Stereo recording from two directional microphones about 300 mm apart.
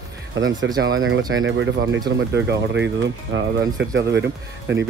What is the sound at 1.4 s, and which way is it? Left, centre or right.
Speech, right.